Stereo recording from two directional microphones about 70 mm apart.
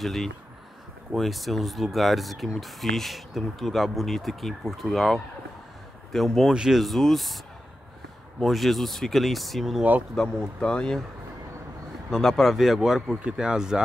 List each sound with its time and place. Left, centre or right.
0.0 s speech: centre
6.5 s speech: centre
6.8 s speech: centre
8.4 s speech: centre
10.1 s speech: centre
12.1 s speech: centre